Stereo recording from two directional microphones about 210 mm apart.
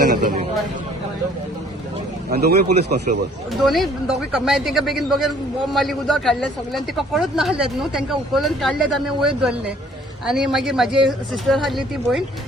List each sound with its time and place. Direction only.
2.3 s speech: 50° right (ahead or behind)
3.6 s speech: centre (ahead or behind)